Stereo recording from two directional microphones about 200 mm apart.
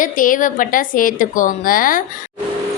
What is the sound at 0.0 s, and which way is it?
A woman's voice, 40° left (ahead or behind).